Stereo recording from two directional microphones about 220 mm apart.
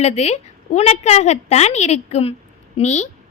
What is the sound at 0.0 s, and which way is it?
A woman's voice, 30° left (ahead or behind).